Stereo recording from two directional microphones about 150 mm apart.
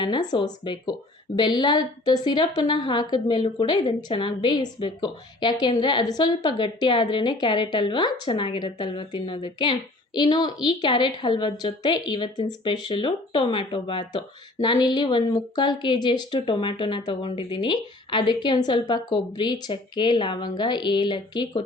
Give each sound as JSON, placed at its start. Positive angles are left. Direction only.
{"t": 0.0, "sound": "a woman's voice", "side_deg": 30}